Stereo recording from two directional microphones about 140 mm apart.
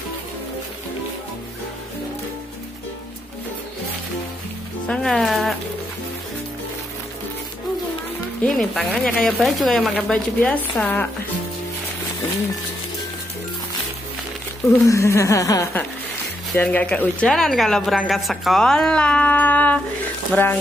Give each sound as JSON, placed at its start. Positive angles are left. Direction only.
{"t": 4.8, "sound": "a woman's voice", "side_deg": 5}
{"t": 8.5, "sound": "a woman's voice", "side_deg": 5}
{"t": 14.9, "sound": "a sound", "side_deg": 20}
{"t": 16.5, "sound": "a woman's voice", "side_deg": 10}